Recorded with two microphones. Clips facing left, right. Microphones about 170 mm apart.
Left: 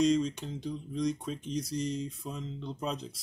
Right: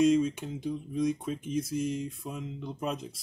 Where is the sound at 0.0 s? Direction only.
10° right (ahead or behind).